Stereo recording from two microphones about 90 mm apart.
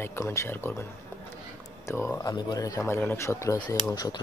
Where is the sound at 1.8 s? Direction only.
30° left (ahead or behind).